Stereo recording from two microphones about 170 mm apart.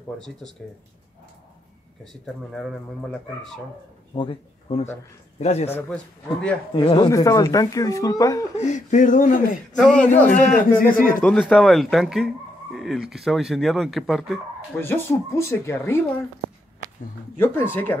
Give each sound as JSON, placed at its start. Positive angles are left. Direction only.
{"t": 0.2, "sound": "speech", "side_deg": 5}
{"t": 2.5, "sound": "speech", "side_deg": 0}
{"t": 4.1, "sound": "a man's voice", "side_deg": 30}
{"t": 6.7, "sound": "speech", "side_deg": 25}
{"t": 8.5, "sound": "speech", "side_deg": 45}
{"t": 9.8, "sound": "speech", "side_deg": 5}
{"t": 10.5, "sound": "speech", "side_deg": 55}
{"t": 11.2, "sound": "speech", "side_deg": 5}
{"t": 14.8, "sound": "speech", "side_deg": 15}
{"t": 17.4, "sound": "speech", "side_deg": 15}